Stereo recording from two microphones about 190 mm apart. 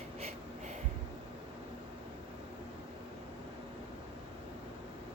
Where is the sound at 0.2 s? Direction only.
35° right (ahead or behind).